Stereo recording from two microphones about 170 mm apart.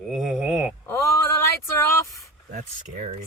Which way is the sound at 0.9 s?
15° left (ahead or behind).